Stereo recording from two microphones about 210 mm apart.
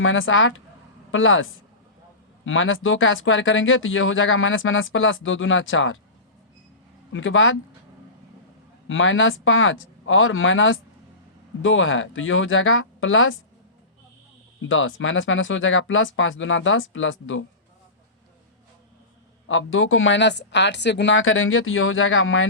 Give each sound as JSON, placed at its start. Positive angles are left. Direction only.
{"t": 0.0, "sound": "speech", "side_deg": 70}
{"t": 7.1, "sound": "speech", "side_deg": 65}
{"t": 8.9, "sound": "speech", "side_deg": 65}
{"t": 14.7, "sound": "speech", "side_deg": 70}
{"t": 19.5, "sound": "speech", "side_deg": 70}